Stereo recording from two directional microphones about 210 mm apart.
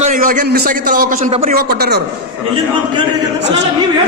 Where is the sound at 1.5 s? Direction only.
45° right (ahead or behind).